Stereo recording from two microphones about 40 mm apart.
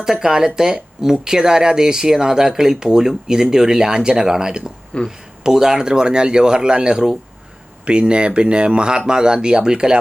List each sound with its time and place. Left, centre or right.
0.0 s speech: centre
4.9 s speech: left
5.4 s speech: centre